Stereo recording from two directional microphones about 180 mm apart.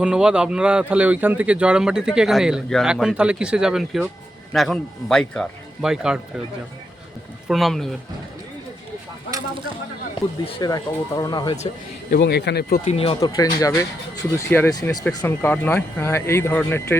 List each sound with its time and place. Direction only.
0.0 s speech: 5° right (ahead or behind)
7.4 s speech: centre (ahead or behind)
10.2 s speech: 25° left (ahead or behind)
12.1 s speech: 65° left (ahead or behind)
12.8 s speech: 35° left (ahead or behind)
13.1 s speech: 20° left (ahead or behind)
15.0 s speech: 10° left (ahead or behind)